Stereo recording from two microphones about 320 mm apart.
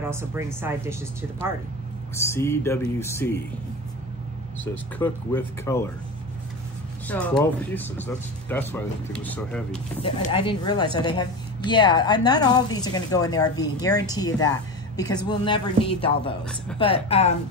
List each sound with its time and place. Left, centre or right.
0.0 s a woman's voice: centre
2.1 s a woman's voice: centre
4.9 s speech: centre
7.1 s speech: centre
10.0 s a woman's voice: centre